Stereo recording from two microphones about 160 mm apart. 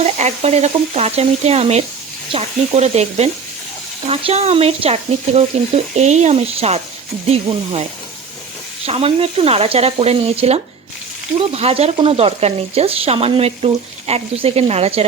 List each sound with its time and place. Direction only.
0.0 s speech: 45° right (ahead or behind)